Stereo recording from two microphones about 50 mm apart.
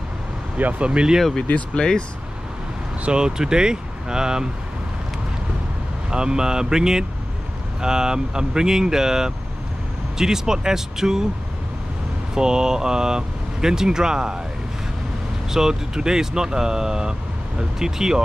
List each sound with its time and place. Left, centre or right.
0.6 s speech: right
1.5 s speech: centre
3.1 s speech: centre
6.0 s speech: centre
12.4 s speech: centre
15.5 s speech: centre